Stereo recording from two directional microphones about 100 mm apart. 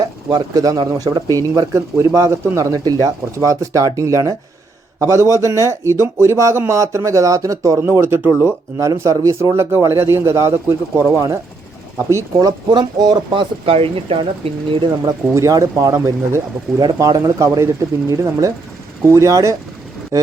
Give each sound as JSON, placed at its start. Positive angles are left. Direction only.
{"t": 0.0, "sound": "speech", "side_deg": -40}
{"t": 8.0, "sound": "speech", "side_deg": -25}
{"t": 8.8, "sound": "speech", "side_deg": -40}
{"t": 12.4, "sound": "speech", "side_deg": -40}
{"t": 13.3, "sound": "speech", "side_deg": -65}
{"t": 15.0, "sound": "speech", "side_deg": -35}